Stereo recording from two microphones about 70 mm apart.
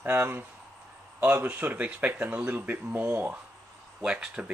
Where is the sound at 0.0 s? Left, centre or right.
Right.